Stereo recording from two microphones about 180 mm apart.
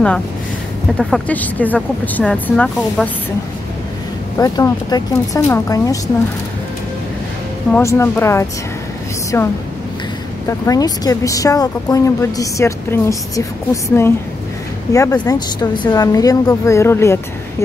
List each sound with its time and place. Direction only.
0.9 s speech: 5° left (ahead or behind)
4.4 s speech: 20° left (ahead or behind)
7.7 s speech: 15° left (ahead or behind)